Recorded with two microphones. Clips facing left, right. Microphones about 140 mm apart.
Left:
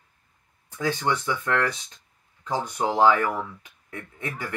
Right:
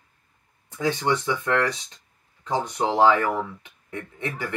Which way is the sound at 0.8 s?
20° right (ahead or behind).